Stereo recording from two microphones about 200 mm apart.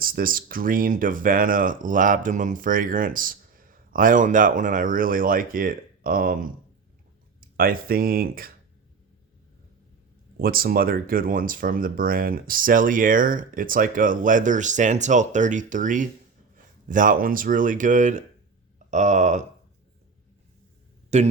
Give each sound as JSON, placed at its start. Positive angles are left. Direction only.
{"t": 0.0, "sound": "speech", "side_deg": -45}
{"t": 7.5, "sound": "speech", "side_deg": -45}
{"t": 10.3, "sound": "speech", "side_deg": -45}
{"t": 21.1, "sound": "speech", "side_deg": -35}